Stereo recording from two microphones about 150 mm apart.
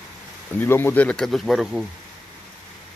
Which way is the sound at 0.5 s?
15° left (ahead or behind).